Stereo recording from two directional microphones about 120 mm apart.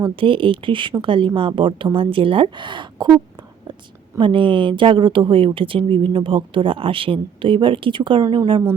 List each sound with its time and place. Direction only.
0.0 s speech: 45° right (ahead or behind)
4.2 s speech: 45° right (ahead or behind)